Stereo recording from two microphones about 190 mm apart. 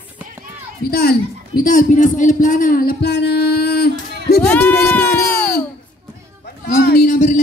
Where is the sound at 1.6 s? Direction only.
45° left (ahead or behind).